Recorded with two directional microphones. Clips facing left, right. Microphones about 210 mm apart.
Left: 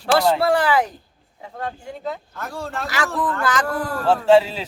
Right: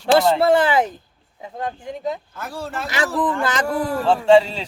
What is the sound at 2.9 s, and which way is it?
Speech, 20° right (ahead or behind).